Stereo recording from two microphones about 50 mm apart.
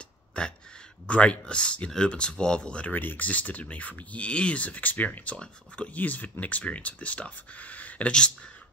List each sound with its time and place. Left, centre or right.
0.3 s speech: left
2.9 s speech: left